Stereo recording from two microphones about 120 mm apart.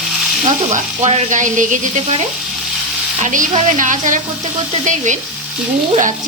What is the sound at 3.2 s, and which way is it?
Frying, 90° right.